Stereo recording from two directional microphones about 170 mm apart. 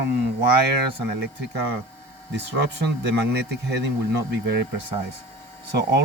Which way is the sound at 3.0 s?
90° right.